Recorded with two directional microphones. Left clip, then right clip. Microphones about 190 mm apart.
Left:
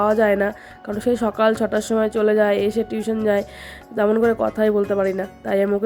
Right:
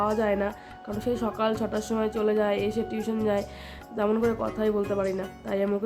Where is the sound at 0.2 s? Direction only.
30° left (ahead or behind).